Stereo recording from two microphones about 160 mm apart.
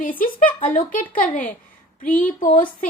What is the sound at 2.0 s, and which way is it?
Speech, 10° left (ahead or behind).